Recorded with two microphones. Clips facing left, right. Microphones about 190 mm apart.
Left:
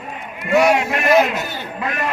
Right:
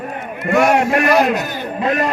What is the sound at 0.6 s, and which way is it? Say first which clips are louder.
Speech: right 3 dB; 50° right (ahead or behind).